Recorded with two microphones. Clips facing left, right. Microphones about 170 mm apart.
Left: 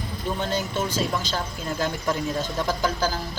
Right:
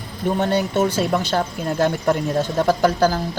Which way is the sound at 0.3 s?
65° right (ahead or behind).